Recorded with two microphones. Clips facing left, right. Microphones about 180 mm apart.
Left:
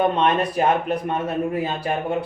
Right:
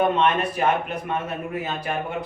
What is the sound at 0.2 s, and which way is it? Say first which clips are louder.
Speech: left 2 dB; 35° left (ahead or behind).